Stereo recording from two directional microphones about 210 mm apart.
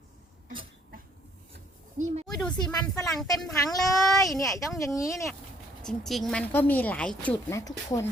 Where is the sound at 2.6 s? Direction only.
20° left (ahead or behind).